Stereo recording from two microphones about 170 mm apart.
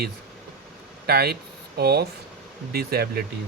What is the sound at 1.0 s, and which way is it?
Speech, 65° right (ahead or behind).